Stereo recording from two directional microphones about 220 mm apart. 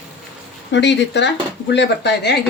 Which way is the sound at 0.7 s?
55° left (ahead or behind).